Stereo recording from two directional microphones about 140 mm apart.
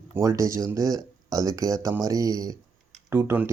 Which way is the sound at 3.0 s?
15° right (ahead or behind).